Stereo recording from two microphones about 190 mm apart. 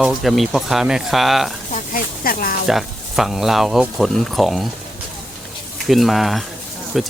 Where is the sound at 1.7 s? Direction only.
45° left (ahead or behind).